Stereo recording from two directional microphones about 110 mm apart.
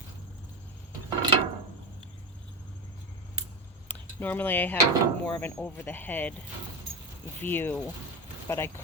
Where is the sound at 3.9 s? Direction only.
15° left (ahead or behind).